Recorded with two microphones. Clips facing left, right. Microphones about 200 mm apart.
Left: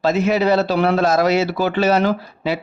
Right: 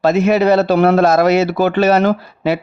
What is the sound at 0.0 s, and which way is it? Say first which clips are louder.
A man's voice: right 4 dB; 55° right (ahead or behind).